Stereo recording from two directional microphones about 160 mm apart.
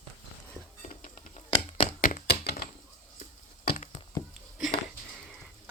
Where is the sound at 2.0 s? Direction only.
60° left (ahead or behind).